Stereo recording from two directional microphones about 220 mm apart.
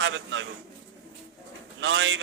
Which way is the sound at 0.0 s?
60° right (ahead or behind).